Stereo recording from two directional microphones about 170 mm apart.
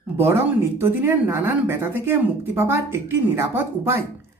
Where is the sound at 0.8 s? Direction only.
15° right (ahead or behind).